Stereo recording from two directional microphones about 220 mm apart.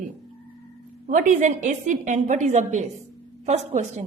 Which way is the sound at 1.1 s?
35° right (ahead or behind).